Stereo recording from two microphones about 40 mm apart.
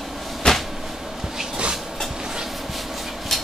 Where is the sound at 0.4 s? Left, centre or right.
Centre.